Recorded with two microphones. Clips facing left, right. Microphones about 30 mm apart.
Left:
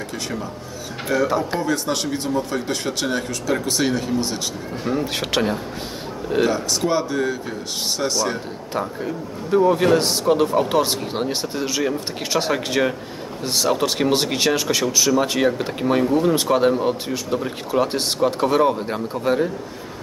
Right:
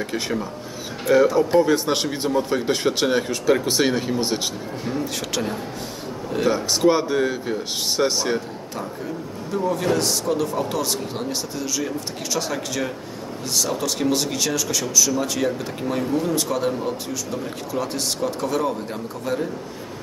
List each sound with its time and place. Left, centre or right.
0.1 s speech: centre
4.8 s a man's voice: left
6.5 s speech: centre
9.5 s a man's voice: left